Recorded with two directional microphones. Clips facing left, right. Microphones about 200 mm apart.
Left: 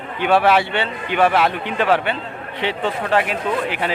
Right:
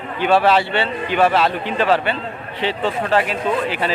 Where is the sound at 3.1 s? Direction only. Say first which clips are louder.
Even; 15° left (ahead or behind).